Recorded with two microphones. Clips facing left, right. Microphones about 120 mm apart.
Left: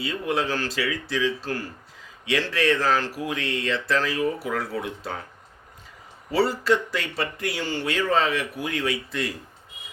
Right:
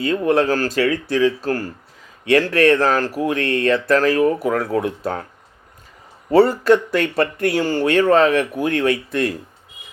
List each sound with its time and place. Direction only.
0.0 s speech: 50° right (ahead or behind)
6.3 s speech: 50° right (ahead or behind)